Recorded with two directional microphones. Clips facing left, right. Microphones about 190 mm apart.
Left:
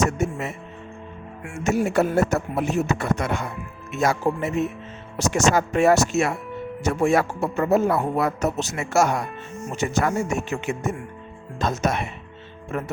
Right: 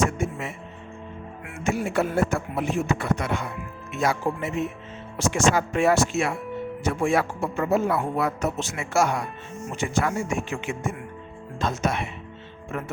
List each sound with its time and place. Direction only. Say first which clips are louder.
0.0 s speech: left 2 dB; 40° left (ahead or behind)
1.6 s speech: left 4 dB; 40° left (ahead or behind)